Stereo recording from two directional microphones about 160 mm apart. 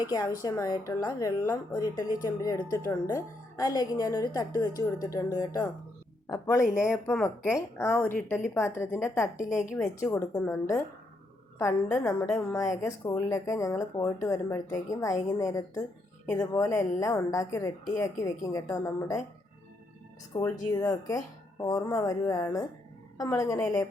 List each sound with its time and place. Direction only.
0.0 s a woman's voice: 20° left (ahead or behind)
20.3 s speech: 20° left (ahead or behind)